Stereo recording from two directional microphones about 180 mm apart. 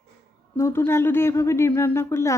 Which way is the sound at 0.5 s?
15° left (ahead or behind).